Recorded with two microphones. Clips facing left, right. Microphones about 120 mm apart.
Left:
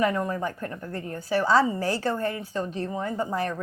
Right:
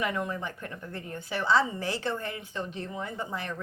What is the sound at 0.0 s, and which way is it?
A woman's voice, 40° left (ahead or behind).